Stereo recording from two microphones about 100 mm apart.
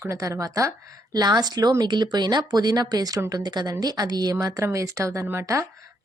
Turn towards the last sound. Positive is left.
turn(degrees=-30)  # may be behind; listen again after turning